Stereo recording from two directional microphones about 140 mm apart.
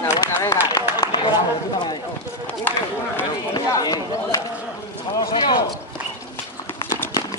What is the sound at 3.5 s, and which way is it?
Speech, 25° left (ahead or behind).